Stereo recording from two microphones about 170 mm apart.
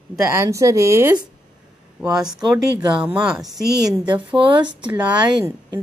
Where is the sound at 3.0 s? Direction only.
5° right (ahead or behind).